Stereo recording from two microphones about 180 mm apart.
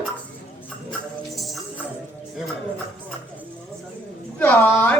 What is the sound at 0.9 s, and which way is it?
Tambourine, centre (ahead or behind).